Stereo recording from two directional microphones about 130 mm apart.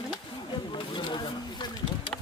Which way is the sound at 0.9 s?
35° left (ahead or behind).